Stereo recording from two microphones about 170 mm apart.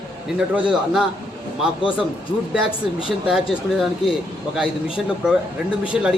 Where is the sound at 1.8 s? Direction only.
30° left (ahead or behind).